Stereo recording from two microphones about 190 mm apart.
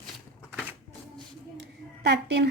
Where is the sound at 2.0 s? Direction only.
65° right (ahead or behind).